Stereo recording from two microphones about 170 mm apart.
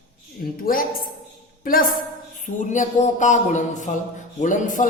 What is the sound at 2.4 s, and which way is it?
Speech, 50° left (ahead or behind).